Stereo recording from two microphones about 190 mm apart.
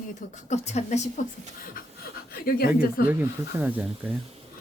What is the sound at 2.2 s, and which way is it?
Speech, 55° left (ahead or behind).